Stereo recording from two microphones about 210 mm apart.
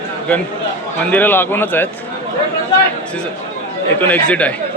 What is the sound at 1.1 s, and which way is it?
Speech, 10° left (ahead or behind).